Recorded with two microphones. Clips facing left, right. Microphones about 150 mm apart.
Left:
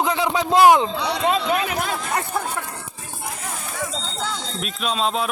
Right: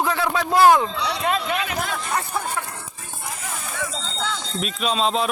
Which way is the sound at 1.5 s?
40° left (ahead or behind).